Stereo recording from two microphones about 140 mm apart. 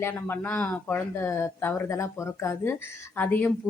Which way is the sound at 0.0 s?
15° left (ahead or behind).